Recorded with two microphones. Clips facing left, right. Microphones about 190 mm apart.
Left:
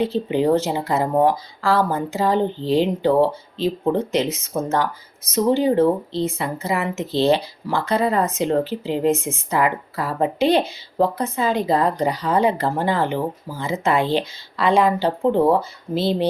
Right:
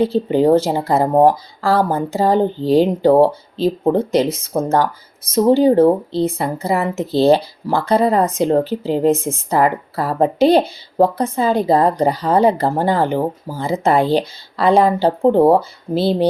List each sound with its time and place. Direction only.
0.0 s speech: 40° right (ahead or behind)